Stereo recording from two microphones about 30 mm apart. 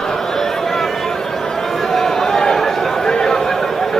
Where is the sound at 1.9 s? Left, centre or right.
Centre.